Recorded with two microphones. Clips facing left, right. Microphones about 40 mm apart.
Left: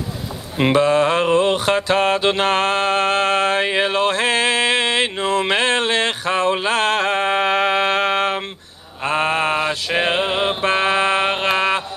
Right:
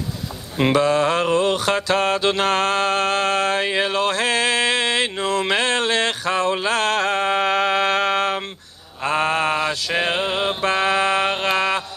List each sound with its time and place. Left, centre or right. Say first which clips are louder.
0.7 s mantra: left 2 dB; left